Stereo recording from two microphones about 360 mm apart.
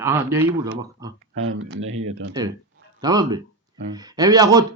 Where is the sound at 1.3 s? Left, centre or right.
Right.